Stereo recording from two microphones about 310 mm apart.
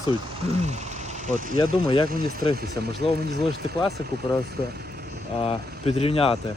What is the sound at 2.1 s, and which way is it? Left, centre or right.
Speech, right.